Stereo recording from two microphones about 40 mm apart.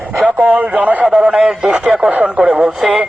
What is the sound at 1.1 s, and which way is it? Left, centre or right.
Speech, centre.